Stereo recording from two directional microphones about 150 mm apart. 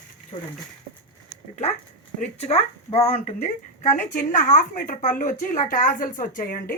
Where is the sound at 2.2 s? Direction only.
45° left (ahead or behind).